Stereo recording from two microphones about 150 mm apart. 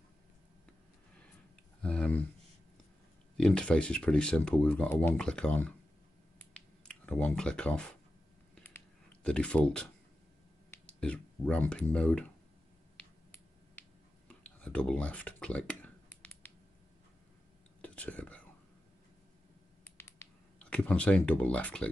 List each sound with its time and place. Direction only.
1.8 s a sound: 5° left (ahead or behind)
3.3 s speech: 5° left (ahead or behind)
6.3 s a sound: 10° left (ahead or behind)
8.6 s clicking: 10° left (ahead or behind)
10.7 s speech: 5° left (ahead or behind)
13.7 s a sound: 10° left (ahead or behind)
17.8 s whispering: 10° left (ahead or behind)
19.8 s finger snapping: 15° left (ahead or behind)
20.5 s speech: 5° left (ahead or behind)